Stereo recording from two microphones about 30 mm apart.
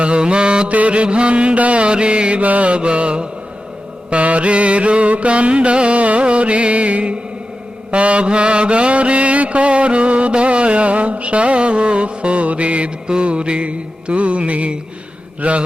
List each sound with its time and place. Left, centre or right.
0.0 s mantra: right
0.7 s music: right
2.4 s mantra: right
2.7 s music: right
4.1 s mantra: right